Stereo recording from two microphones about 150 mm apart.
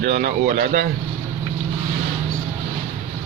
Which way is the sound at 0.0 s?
80° right.